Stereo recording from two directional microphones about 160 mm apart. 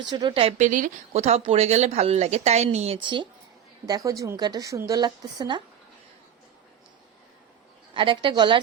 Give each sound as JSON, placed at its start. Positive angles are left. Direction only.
{"t": 0.0, "sound": "a woman's voice", "side_deg": -30}
{"t": 0.6, "sound": "a woman's voice", "side_deg": -50}
{"t": 7.9, "sound": "speech", "side_deg": -30}